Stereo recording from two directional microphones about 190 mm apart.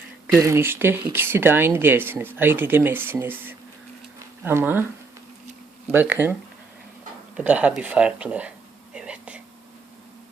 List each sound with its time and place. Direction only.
0.3 s speech: 15° right (ahead or behind)
5.9 s speech: 10° right (ahead or behind)
7.3 s a sound: 5° right (ahead or behind)